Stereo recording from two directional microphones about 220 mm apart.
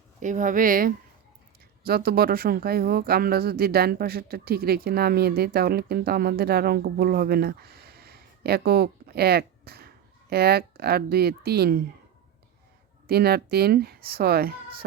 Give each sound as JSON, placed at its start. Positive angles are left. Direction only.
{"t": 0.2, "sound": "a woman's voice", "side_deg": -35}
{"t": 13.1, "sound": "speech", "side_deg": -45}